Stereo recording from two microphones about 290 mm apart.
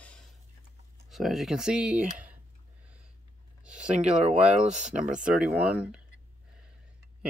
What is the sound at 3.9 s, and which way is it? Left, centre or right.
Speech, right.